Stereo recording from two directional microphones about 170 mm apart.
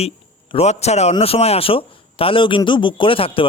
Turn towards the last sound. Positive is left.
turn(degrees=30)  # may be behind; listen again after turning